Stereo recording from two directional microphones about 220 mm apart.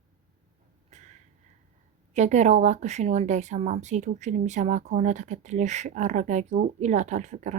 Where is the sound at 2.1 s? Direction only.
30° right (ahead or behind).